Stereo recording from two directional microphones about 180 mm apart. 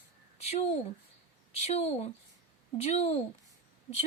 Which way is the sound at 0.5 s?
35° left (ahead or behind).